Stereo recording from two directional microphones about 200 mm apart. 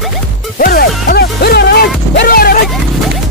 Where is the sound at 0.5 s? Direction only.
45° left (ahead or behind).